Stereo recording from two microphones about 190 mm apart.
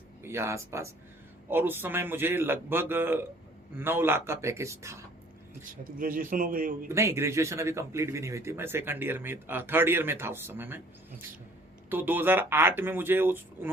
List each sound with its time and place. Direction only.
0.2 s speech: 15° right (ahead or behind)
5.6 s a man's voice: 45° right (ahead or behind)
6.8 s speech: 15° right (ahead or behind)
11.9 s speech: 10° right (ahead or behind)